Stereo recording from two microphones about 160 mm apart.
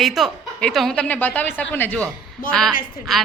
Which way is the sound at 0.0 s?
Centre (ahead or behind).